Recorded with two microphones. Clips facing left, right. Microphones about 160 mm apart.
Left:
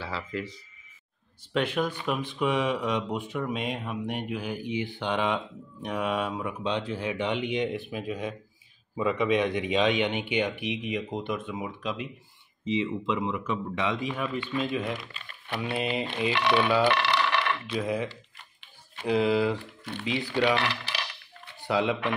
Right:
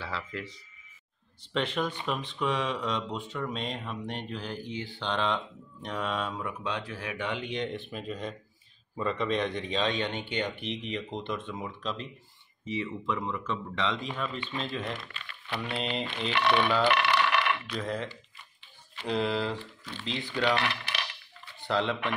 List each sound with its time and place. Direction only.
0.0 s speech: 5° left (ahead or behind)
15.2 s typing: 55° left (ahead or behind)
15.6 s speech: 10° left (ahead or behind)
17.1 s a sound: centre (ahead or behind)
17.7 s speech: 10° left (ahead or behind)
19.0 s speech: 10° left (ahead or behind)
19.8 s speech: 60° left (ahead or behind)
21.5 s speech: 10° left (ahead or behind)